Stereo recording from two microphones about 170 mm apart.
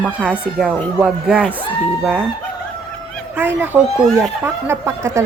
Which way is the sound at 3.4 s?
10° right (ahead or behind).